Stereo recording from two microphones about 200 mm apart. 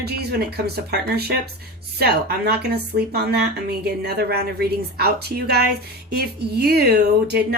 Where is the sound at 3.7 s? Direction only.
55° right (ahead or behind).